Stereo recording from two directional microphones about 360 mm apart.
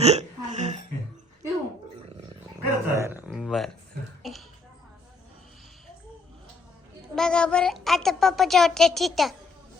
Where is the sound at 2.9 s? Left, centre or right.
Centre.